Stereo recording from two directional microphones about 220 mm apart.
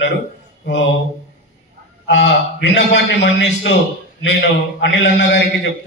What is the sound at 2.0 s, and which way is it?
A man's voice, 55° left (ahead or behind).